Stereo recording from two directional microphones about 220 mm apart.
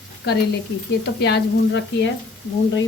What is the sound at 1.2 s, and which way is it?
Speech, 50° left (ahead or behind).